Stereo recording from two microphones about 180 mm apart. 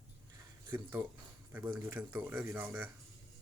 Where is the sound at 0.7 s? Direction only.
10° right (ahead or behind).